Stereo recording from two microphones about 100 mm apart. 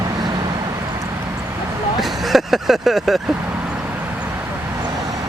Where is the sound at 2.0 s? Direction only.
Centre (ahead or behind).